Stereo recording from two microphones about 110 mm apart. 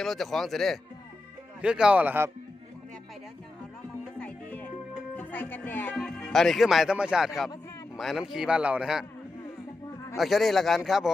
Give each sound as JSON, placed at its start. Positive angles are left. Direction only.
{"t": 0.0, "sound": "speech", "side_deg": 0}
{"t": 1.6, "sound": "speech", "side_deg": -10}
{"t": 4.2, "sound": "music", "side_deg": 10}
{"t": 5.1, "sound": "speech", "side_deg": 15}
{"t": 6.0, "sound": "speech", "side_deg": 5}
{"t": 10.2, "sound": "speech", "side_deg": 0}